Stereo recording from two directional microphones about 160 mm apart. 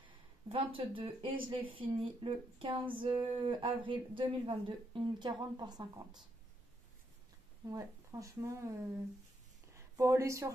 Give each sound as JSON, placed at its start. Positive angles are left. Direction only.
{"t": 0.0, "sound": "speech", "side_deg": -35}
{"t": 7.7, "sound": "speech", "side_deg": -20}